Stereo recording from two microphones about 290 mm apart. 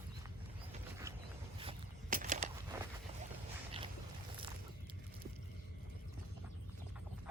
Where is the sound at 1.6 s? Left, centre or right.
Right.